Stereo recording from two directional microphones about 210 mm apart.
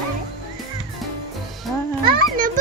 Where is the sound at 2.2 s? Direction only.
40° right (ahead or behind).